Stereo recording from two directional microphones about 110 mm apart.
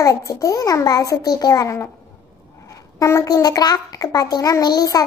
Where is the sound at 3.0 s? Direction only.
30° left (ahead or behind).